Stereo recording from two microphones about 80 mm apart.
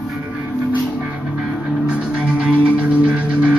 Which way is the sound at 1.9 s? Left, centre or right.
Centre.